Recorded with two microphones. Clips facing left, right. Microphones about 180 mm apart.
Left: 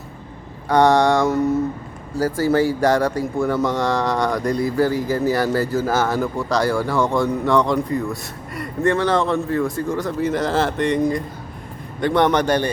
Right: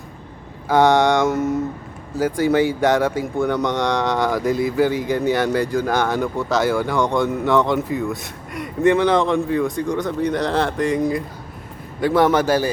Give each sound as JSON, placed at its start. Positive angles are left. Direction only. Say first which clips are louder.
{"t": 0.7, "sound": "speech", "louder": "even", "side_deg": 0}